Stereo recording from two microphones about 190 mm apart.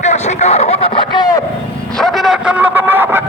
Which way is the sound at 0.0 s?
35° left (ahead or behind).